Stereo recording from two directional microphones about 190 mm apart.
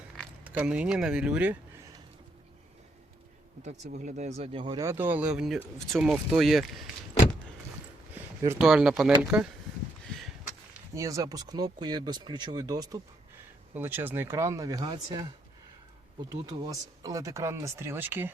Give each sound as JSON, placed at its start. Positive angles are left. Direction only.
{"t": 0.4, "sound": "speech", "side_deg": -10}
{"t": 3.6, "sound": "speech", "side_deg": -35}
{"t": 4.6, "sound": "speech", "side_deg": -20}
{"t": 8.4, "sound": "speech", "side_deg": -5}
{"t": 10.9, "sound": "speech", "side_deg": -15}
{"t": 16.3, "sound": "speech", "side_deg": -20}